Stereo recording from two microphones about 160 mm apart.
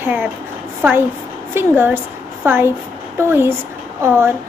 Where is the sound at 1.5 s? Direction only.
15° right (ahead or behind).